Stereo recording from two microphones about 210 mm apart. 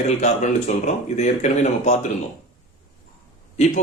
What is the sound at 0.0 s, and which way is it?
Speech, 30° left (ahead or behind).